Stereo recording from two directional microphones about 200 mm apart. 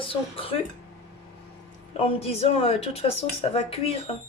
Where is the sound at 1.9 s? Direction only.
30° left (ahead or behind).